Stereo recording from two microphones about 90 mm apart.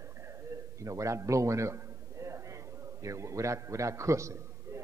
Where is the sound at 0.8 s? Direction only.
35° right (ahead or behind).